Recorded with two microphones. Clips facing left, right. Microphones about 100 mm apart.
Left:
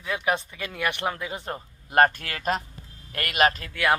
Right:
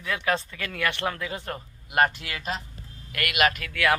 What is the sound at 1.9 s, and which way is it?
Speech, 40° left (ahead or behind).